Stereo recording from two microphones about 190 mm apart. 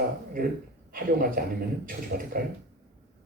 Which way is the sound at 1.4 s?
50° right (ahead or behind).